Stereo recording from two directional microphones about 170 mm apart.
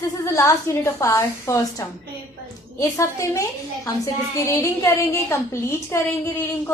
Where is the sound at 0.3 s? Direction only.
20° left (ahead or behind).